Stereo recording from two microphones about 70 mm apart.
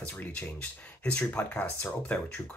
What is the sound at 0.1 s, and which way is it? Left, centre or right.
Speech, left.